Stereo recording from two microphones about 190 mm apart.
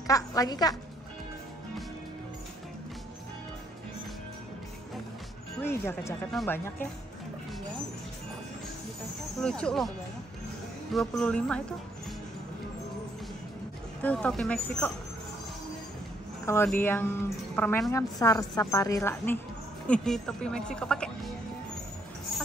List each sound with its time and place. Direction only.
0.0 s a woman's voice: 20° left (ahead or behind)
5.6 s speech: 10° left (ahead or behind)
9.4 s speech: 5° left (ahead or behind)
14.0 s speech: 5° left (ahead or behind)
16.6 s speech: 10° left (ahead or behind)